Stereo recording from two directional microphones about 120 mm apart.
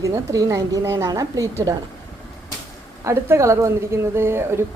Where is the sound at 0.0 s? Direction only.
25° right (ahead or behind).